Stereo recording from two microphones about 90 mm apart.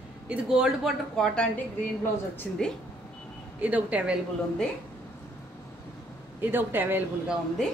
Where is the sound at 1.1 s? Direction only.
10° left (ahead or behind).